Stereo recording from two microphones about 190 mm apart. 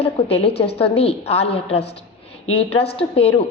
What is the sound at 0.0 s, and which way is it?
A woman's voice, 30° left (ahead or behind).